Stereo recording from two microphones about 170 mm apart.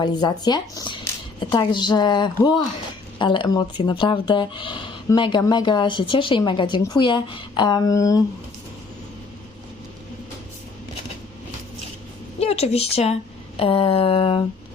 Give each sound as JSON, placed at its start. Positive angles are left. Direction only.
{"t": 0.0, "sound": "speech", "side_deg": 25}
{"t": 12.4, "sound": "speech", "side_deg": 40}
{"t": 13.6, "sound": "a sound", "side_deg": 30}